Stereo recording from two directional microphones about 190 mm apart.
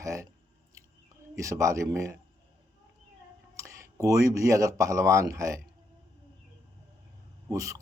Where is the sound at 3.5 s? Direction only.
15° right (ahead or behind).